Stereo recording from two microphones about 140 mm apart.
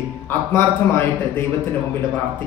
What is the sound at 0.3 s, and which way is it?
A man's voice, 15° left (ahead or behind).